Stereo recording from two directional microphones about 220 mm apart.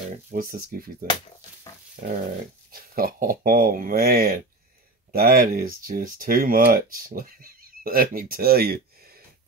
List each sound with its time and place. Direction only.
0.1 s speech: 40° right (ahead or behind)
2.0 s dog: 40° right (ahead or behind)
2.7 s speech: 40° right (ahead or behind)